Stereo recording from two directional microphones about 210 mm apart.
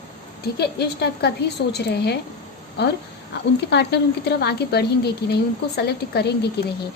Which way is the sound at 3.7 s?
55° left (ahead or behind).